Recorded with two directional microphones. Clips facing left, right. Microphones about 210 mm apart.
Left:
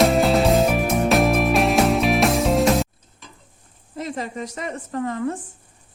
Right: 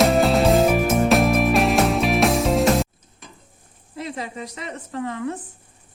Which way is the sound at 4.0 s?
45° left (ahead or behind).